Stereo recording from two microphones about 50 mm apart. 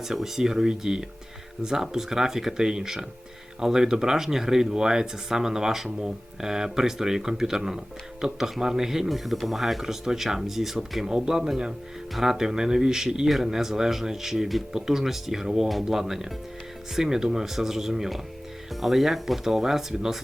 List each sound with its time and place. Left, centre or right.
0.0 s speech: centre